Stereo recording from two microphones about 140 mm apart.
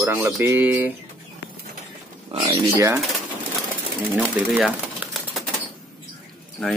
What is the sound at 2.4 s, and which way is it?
Speech, 20° right (ahead or behind).